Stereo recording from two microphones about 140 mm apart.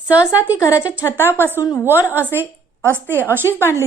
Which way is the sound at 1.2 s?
15° left (ahead or behind).